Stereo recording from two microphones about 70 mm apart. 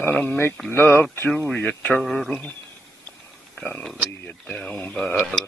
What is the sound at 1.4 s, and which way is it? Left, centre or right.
Mantra, left.